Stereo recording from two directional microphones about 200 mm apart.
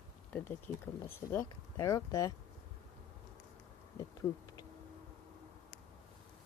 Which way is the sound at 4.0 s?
15° left (ahead or behind).